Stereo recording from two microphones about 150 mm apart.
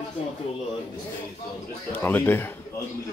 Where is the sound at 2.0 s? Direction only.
15° left (ahead or behind).